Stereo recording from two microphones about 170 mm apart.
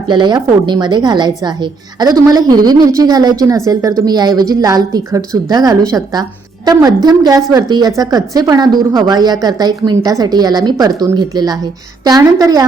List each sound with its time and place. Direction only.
0.1 s a woman's voice: 25° right (ahead or behind)